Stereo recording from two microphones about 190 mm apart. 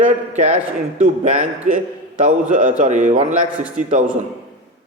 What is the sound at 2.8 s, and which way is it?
Speech, 35° right (ahead or behind).